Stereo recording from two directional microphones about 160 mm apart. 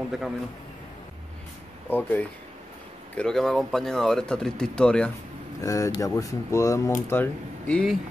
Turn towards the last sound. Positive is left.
turn(degrees=5)  # may be behind; listen again after turning